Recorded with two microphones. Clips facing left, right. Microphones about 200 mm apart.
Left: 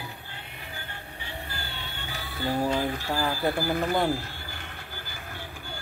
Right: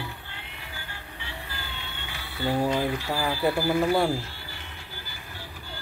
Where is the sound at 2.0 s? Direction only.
40° left (ahead or behind).